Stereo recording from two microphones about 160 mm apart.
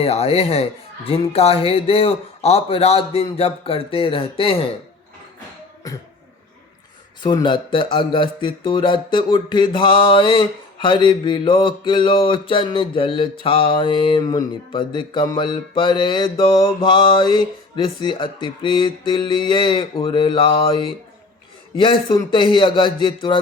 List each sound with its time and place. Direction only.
0.0 s speech: 40° left (ahead or behind)
7.2 s speech: 30° left (ahead or behind)